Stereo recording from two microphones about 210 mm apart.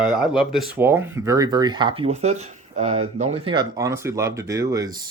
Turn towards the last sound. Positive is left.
turn(degrees=-15)  # may be behind; listen again after turning